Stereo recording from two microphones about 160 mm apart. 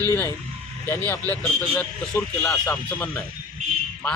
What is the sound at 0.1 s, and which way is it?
Speech, 15° left (ahead or behind).